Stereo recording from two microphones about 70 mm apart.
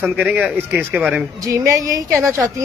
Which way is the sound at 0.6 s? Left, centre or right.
Right.